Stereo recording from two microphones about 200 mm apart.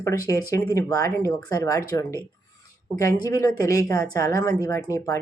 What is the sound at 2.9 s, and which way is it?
Speech, 15° left (ahead or behind).